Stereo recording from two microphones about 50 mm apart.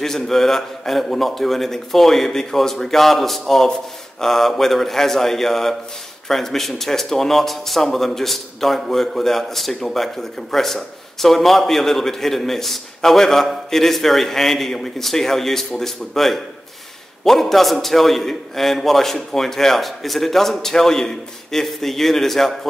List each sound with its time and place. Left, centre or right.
0.0 s speech: centre